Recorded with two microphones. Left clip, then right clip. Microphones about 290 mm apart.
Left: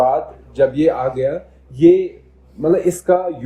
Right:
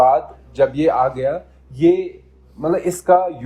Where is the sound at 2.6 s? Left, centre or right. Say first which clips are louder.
Left 4 dB; centre.